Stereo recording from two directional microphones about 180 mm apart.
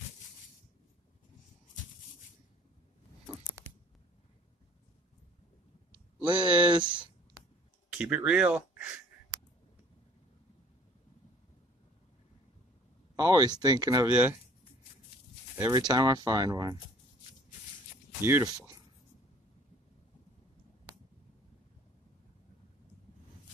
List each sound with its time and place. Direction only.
6.2 s a sound: 25° right (ahead or behind)
8.0 s speech: 5° right (ahead or behind)
13.1 s speech: 20° right (ahead or behind)
15.5 s speech: 20° right (ahead or behind)
18.2 s speech: 15° right (ahead or behind)